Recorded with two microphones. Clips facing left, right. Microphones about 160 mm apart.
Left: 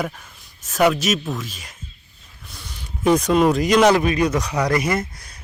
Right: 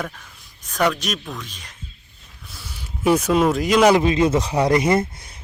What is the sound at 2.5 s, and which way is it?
Speech, 5° right (ahead or behind).